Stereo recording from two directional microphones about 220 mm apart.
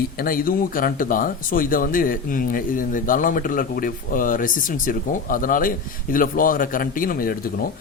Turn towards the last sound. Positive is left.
turn(degrees=40)  # may be behind; listen again after turning